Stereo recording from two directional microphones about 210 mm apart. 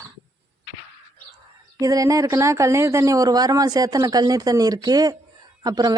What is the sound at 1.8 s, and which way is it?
Speech, 15° right (ahead or behind).